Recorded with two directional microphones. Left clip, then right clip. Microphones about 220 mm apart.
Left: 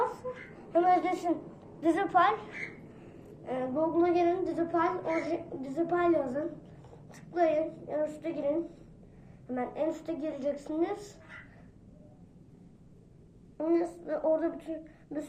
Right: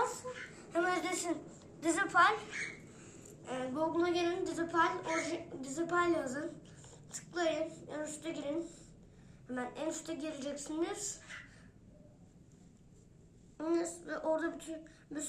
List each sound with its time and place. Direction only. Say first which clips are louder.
0.7 s a woman's voice: left 8 dB; 25° right (ahead or behind)
13.6 s a woman's voice: left 6 dB; 15° right (ahead or behind)